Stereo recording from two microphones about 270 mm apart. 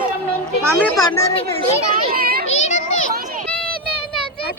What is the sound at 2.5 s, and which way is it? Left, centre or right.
Children playing, left.